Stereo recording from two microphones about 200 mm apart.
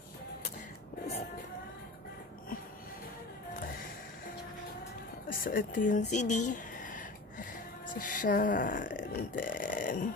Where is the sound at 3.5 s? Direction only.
45° left (ahead or behind).